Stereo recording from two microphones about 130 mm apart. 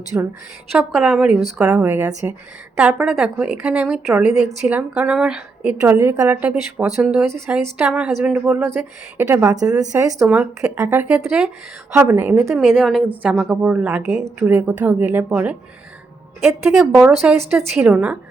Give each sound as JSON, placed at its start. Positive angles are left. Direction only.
{"t": 0.1, "sound": "a woman's voice", "side_deg": -10}
{"t": 0.7, "sound": "a woman's voice", "side_deg": 0}
{"t": 6.0, "sound": "a woman's voice", "side_deg": -20}
{"t": 7.3, "sound": "a woman's voice", "side_deg": -20}
{"t": 7.9, "sound": "a woman's voice", "side_deg": -5}
{"t": 10.2, "sound": "a woman's voice", "side_deg": -10}
{"t": 11.3, "sound": "a woman's voice", "side_deg": -5}
{"t": 11.9, "sound": "a woman's voice", "side_deg": -15}
{"t": 12.5, "sound": "a woman's voice", "side_deg": 0}